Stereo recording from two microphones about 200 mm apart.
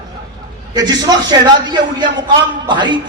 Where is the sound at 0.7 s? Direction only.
20° right (ahead or behind).